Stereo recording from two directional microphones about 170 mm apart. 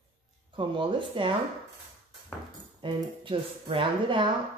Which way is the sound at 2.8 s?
30° right (ahead or behind).